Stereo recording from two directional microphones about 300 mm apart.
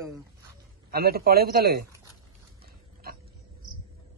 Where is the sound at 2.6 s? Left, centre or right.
Right.